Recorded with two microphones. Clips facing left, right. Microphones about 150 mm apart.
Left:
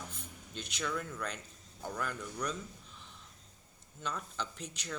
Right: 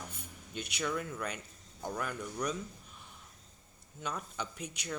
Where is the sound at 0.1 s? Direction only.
10° right (ahead or behind).